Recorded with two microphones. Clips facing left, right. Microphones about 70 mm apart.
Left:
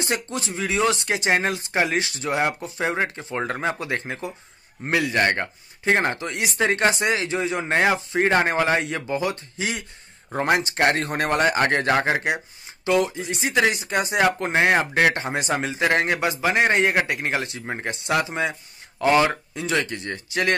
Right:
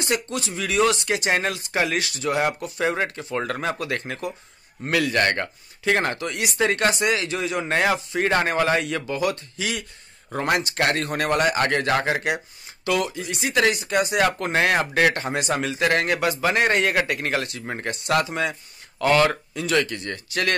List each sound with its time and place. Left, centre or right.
0.0 s speech: left